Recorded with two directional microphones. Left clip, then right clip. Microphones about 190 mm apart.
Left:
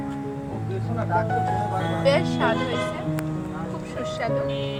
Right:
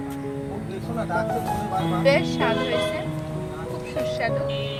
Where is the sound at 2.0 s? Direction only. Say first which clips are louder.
Even; 5° right (ahead or behind).